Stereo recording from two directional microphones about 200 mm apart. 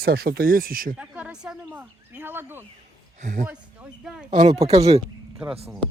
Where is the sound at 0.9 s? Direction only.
5° right (ahead or behind).